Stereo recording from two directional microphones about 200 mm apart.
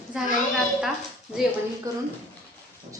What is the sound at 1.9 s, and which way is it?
Speech, 15° right (ahead or behind).